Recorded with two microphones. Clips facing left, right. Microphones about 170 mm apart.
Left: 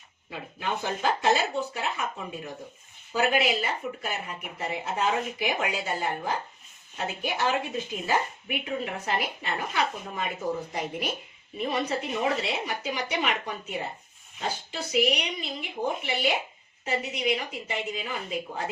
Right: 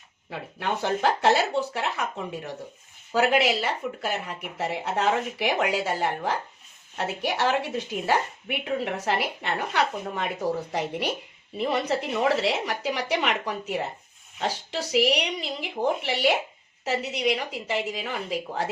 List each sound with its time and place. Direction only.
0.3 s a woman's voice: 70° right (ahead or behind)